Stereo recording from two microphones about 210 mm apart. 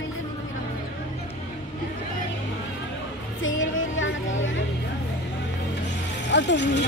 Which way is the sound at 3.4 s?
65° left (ahead or behind).